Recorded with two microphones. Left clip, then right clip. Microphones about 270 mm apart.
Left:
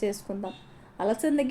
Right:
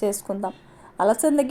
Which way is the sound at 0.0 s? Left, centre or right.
Right.